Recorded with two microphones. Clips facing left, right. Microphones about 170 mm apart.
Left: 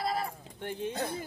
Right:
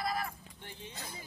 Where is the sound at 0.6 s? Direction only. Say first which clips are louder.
Left 14 dB; 55° left (ahead or behind).